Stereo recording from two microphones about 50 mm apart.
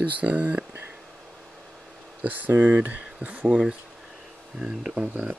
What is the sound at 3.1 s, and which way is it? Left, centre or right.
Speech, right.